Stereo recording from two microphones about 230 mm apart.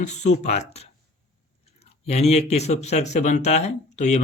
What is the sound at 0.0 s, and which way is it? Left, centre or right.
Speech, left.